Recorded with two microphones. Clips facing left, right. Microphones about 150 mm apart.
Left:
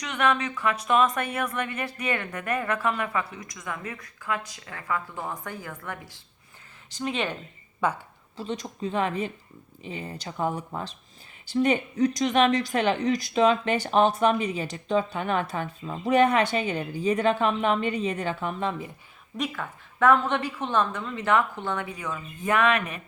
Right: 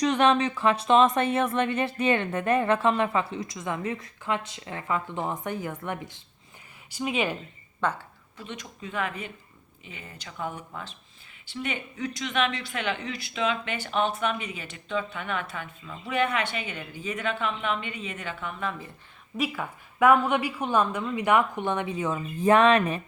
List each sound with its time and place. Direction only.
0.0 s speech: 30° right (ahead or behind)
6.9 s a woman's voice: 10° right (ahead or behind)
7.8 s a woman's voice: 10° left (ahead or behind)
8.4 s speech: 35° left (ahead or behind)
19.4 s a woman's voice: 10° right (ahead or behind); by 23.0 s 30° right (ahead or behind)